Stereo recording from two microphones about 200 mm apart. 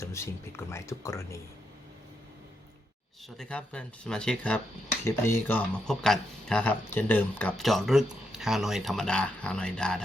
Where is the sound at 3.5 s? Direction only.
5° left (ahead or behind).